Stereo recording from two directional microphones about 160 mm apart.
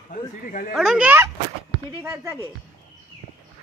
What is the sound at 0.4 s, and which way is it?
Speech, 55° left (ahead or behind).